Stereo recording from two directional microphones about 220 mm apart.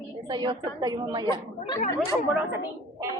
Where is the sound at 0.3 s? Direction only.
20° right (ahead or behind).